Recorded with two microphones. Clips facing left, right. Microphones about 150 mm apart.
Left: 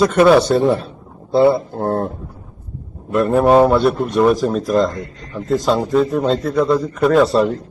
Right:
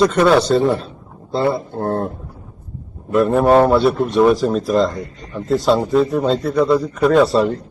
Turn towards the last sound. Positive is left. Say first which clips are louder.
# even
turn(degrees=0)  # may be behind; listen again after turning